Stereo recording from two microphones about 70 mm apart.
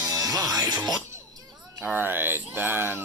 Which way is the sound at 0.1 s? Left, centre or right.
Right.